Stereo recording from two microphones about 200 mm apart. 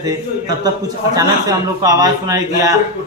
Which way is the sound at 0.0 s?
20° right (ahead or behind).